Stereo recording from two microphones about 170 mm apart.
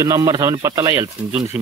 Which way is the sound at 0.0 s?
20° right (ahead or behind).